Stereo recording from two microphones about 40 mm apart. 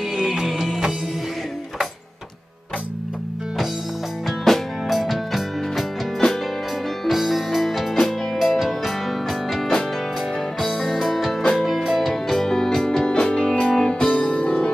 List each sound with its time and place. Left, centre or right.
0.2 s music: centre
4.3 s music: centre
10.8 s music: centre
12.1 s music: centre; by 14.7 s left